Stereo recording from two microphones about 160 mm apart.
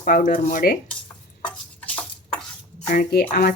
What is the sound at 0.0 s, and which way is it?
Speech, 60° left (ahead or behind).